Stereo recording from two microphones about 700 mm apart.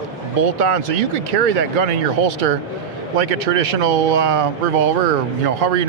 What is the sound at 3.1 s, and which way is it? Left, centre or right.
Speech, right.